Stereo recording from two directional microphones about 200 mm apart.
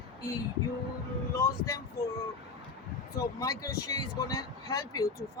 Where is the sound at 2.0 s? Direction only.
50° left (ahead or behind).